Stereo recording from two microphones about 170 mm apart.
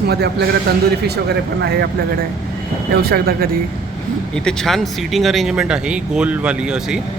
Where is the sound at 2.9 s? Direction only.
65° right (ahead or behind).